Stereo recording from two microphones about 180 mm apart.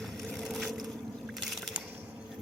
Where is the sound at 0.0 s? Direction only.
Centre (ahead or behind).